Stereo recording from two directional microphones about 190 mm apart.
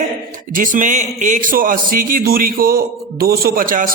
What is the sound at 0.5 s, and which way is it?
A man's voice, 45° right (ahead or behind).